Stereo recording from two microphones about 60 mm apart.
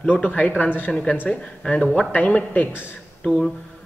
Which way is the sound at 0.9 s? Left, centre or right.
Centre.